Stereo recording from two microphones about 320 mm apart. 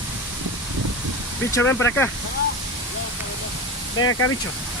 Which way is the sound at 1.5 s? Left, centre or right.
Centre.